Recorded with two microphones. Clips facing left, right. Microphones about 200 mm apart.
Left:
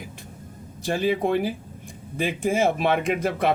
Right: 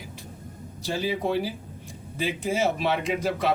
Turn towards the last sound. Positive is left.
turn(degrees=55)  # may be behind; listen again after turning